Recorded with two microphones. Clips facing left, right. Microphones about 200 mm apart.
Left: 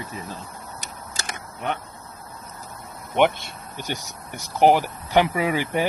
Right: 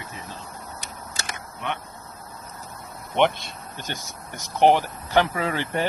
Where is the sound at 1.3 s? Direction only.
40° left (ahead or behind).